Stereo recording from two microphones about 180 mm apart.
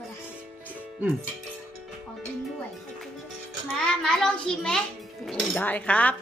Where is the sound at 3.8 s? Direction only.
5° left (ahead or behind).